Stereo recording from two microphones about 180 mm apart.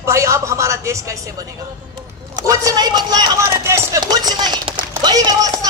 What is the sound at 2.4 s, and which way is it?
A man's voice, 20° right (ahead or behind).